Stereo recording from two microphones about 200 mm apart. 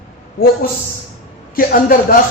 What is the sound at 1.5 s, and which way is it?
Speech, 45° left (ahead or behind).